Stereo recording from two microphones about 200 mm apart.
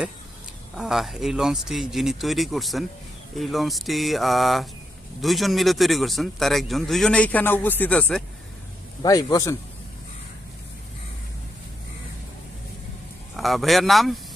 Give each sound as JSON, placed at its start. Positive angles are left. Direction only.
{"t": 0.8, "sound": "a man's voice", "side_deg": 0}
{"t": 9.0, "sound": "a man's voice", "side_deg": 15}
{"t": 13.3, "sound": "a man's voice", "side_deg": 0}